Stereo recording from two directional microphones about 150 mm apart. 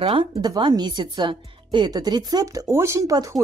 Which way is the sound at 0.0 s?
35° right (ahead or behind).